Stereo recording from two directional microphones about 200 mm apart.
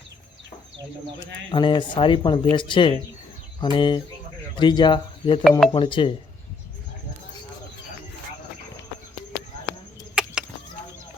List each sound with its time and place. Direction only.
1.5 s speech: 25° left (ahead or behind)
5.4 s speech: centre (ahead or behind)
5.7 s speech: 25° left (ahead or behind)
10.2 s a sound: 5° right (ahead or behind)